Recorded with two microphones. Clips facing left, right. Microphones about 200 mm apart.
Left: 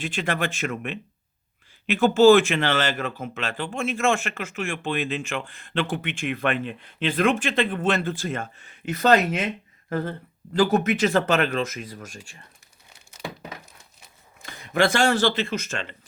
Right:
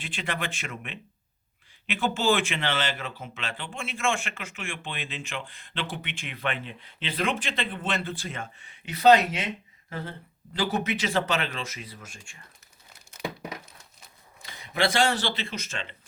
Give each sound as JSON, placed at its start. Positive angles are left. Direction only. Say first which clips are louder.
{"t": 0.0, "sound": "speech", "louder": "left 7 dB", "side_deg": 45}
{"t": 14.4, "sound": "speech", "louder": "left 5 dB", "side_deg": 45}